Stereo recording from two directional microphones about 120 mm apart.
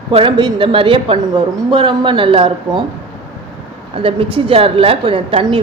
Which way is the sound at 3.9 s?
50° right (ahead or behind).